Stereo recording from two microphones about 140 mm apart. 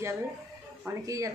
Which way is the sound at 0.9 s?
20° right (ahead or behind).